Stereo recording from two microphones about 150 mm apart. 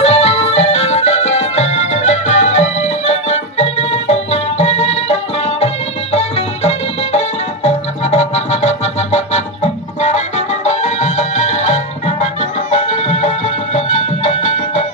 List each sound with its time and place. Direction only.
0.0 s music: 45° left (ahead or behind)